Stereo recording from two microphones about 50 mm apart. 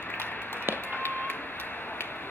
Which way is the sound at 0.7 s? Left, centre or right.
Left.